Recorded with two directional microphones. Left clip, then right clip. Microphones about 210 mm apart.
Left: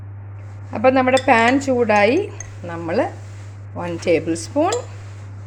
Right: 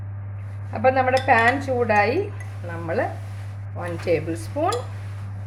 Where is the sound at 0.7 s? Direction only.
40° left (ahead or behind).